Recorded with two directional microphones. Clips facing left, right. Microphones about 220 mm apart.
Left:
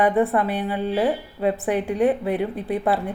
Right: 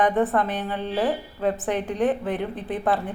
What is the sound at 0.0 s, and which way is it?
A woman's voice, 10° left (ahead or behind).